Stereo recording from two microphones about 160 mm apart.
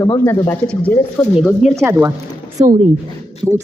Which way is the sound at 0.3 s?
10° left (ahead or behind).